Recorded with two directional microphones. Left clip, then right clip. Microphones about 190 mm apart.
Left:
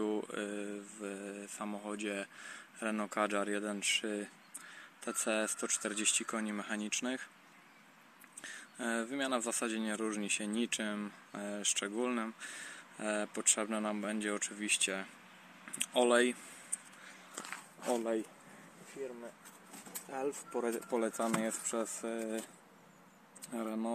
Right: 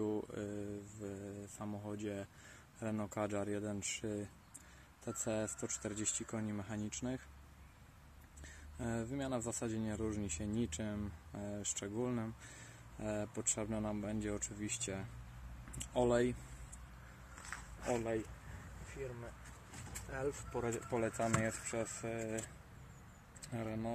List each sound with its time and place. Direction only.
0.0 s mantra: 5° right (ahead or behind)
2.8 s speech: 5° right (ahead or behind)
8.4 s speech: 5° right (ahead or behind)
17.5 s a sound: 20° left (ahead or behind)
20.1 s speech: 30° left (ahead or behind)
23.5 s speech: 35° left (ahead or behind)